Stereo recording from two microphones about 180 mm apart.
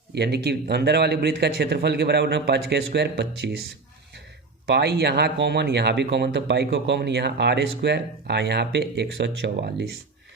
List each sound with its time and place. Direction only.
0.1 s speech: 65° right (ahead or behind)
4.6 s speech: 65° right (ahead or behind)